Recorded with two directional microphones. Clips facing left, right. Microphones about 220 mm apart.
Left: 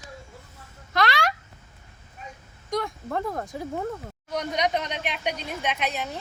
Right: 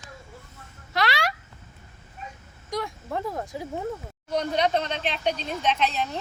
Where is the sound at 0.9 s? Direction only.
50° left (ahead or behind).